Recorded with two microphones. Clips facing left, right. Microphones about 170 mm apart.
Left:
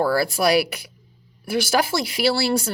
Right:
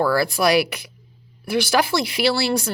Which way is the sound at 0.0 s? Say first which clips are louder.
Right 1 dB; 40° left (ahead or behind).